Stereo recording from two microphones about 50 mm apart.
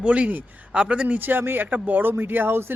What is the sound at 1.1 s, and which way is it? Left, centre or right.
Speech, right.